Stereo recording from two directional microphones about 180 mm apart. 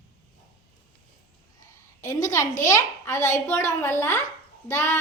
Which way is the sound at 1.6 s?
20° left (ahead or behind).